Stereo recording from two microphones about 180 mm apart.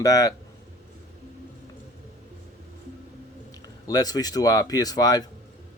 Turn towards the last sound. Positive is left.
turn(degrees=20)  # may be behind; listen again after turning